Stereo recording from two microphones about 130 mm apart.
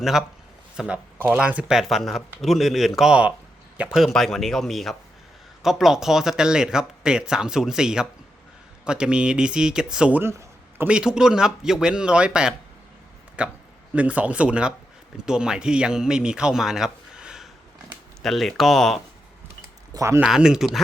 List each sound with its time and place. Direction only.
0.0 s speech: 5° right (ahead or behind)
19.9 s speech: 25° right (ahead or behind)
20.2 s speech: 5° right (ahead or behind)